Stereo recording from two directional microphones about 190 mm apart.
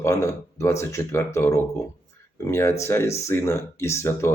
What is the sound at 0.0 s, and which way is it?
Speech, 15° left (ahead or behind).